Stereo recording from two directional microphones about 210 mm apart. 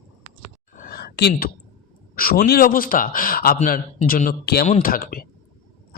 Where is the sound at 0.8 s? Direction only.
45° left (ahead or behind).